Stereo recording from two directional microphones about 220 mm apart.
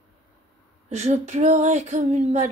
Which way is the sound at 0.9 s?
30° right (ahead or behind).